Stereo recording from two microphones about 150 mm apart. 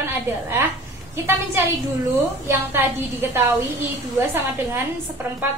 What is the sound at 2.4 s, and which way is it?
A woman's voice, 15° right (ahead or behind).